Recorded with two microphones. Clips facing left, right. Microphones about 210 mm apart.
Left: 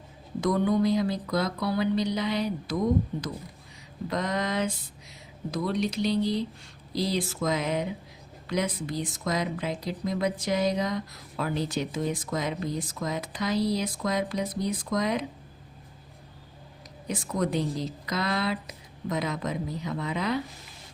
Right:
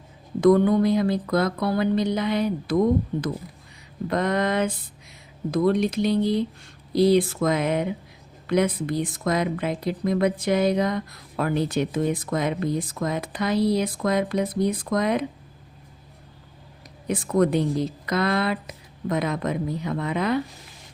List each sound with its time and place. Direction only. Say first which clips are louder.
0.4 s speech: right 7 dB; 55° right (ahead or behind)
4.1 s speech: right 6 dB; 55° right (ahead or behind)
17.1 s speech: right 8 dB; 55° right (ahead or behind)